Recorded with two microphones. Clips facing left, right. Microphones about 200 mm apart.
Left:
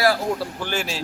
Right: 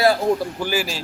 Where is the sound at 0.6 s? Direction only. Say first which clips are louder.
Right 3 dB; 5° right (ahead or behind).